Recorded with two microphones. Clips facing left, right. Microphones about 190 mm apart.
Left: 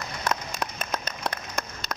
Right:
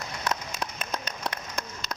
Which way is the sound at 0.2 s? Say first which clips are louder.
Left 2 dB; 50° left (ahead or behind).